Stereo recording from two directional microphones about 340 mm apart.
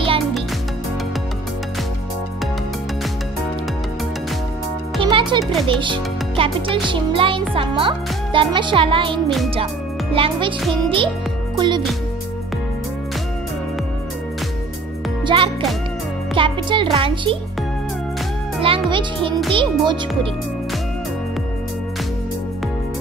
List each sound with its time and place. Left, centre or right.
5.0 s music: centre
5.4 s speech: centre
5.7 s a child's voice: centre
11.5 s music: centre
15.2 s music: centre
16.3 s a child's voice: centre
18.6 s a child's voice: centre